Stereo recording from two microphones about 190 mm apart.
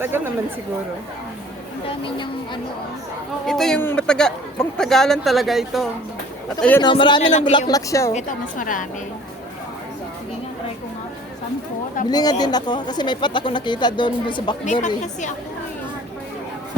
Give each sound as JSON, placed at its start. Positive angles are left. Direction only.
{"t": 1.9, "sound": "speech", "side_deg": 25}
{"t": 3.4, "sound": "speech", "side_deg": 0}
{"t": 6.8, "sound": "speech", "side_deg": 25}
{"t": 7.3, "sound": "a woman's voice", "side_deg": 40}
{"t": 7.7, "sound": "speech", "side_deg": 15}
{"t": 8.1, "sound": "a woman's voice", "side_deg": 45}
{"t": 12.0, "sound": "speech", "side_deg": 20}
{"t": 14.6, "sound": "a woman's voice", "side_deg": 40}